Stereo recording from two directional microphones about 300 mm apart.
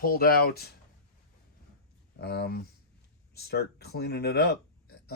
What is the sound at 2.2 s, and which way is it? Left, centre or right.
Speech, left.